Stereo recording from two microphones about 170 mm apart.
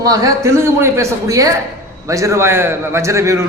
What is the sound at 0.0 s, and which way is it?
A woman's voice, 20° right (ahead or behind).